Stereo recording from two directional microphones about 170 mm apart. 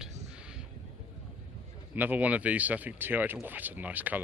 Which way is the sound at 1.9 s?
10° right (ahead or behind).